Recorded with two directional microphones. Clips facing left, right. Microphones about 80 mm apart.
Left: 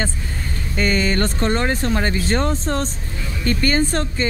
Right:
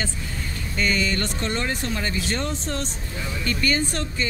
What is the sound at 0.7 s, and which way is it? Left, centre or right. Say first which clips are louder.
Speech: left 5 dB; left.